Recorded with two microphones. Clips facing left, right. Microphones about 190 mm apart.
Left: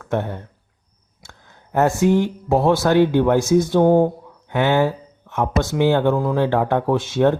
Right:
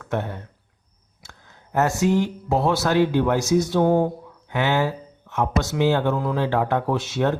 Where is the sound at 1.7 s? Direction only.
55° left (ahead or behind).